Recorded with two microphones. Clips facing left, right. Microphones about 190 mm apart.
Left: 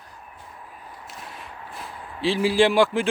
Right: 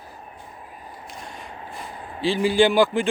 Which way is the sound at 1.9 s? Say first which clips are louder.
Right 2 dB; 25° right (ahead or behind).